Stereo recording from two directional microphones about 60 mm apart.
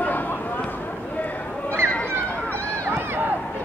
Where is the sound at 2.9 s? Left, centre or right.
Right.